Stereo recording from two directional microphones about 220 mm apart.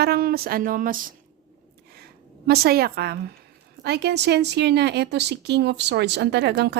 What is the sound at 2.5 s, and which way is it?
A woman's voice, 45° right (ahead or behind).